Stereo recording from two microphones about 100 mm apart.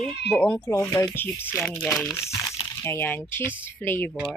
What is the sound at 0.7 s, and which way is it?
Speech, 30° left (ahead or behind).